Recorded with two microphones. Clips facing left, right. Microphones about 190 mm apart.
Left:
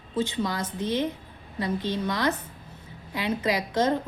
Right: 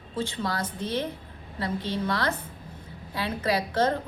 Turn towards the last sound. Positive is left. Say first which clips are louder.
# left 1 dB
turn(degrees=15)  # may be behind; listen again after turning